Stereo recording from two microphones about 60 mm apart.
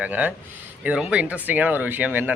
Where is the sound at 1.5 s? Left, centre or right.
Right.